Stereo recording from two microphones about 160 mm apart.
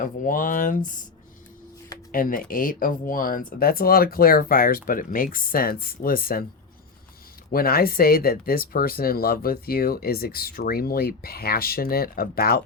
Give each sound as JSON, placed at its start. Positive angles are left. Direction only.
{"t": 0.0, "sound": "speech", "side_deg": 60}
{"t": 2.1, "sound": "speech", "side_deg": 60}
{"t": 7.5, "sound": "speech", "side_deg": 65}